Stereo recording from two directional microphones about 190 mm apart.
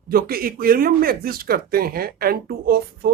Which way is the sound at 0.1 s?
50° right (ahead or behind).